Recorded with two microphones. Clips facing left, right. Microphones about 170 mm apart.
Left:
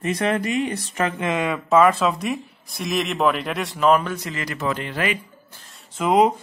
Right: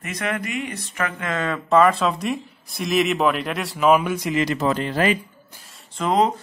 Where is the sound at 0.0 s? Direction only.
30° left (ahead or behind); by 4.6 s 20° right (ahead or behind).